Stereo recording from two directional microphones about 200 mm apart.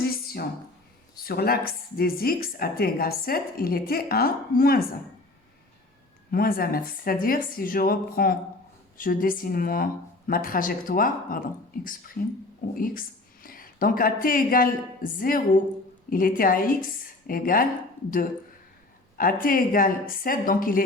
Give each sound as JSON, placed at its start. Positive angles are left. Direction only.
{"t": 0.0, "sound": "a sound", "side_deg": 50}
{"t": 1.2, "sound": "a woman's voice", "side_deg": 50}
{"t": 6.3, "sound": "a woman's voice", "side_deg": 45}
{"t": 19.1, "sound": "a woman's voice", "side_deg": 45}